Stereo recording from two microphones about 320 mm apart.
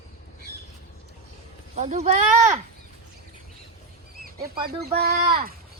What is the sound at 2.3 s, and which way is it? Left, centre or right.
Speech, centre.